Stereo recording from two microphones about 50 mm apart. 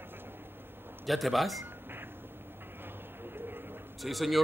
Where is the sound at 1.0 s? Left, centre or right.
Centre.